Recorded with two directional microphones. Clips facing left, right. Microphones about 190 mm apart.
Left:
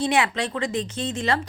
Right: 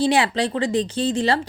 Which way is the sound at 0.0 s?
30° right (ahead or behind).